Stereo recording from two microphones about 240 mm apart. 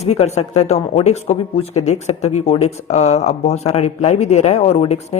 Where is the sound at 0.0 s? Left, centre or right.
Left.